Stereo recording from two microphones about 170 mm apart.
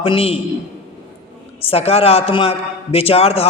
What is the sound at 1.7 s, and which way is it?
A man's voice, 35° left (ahead or behind).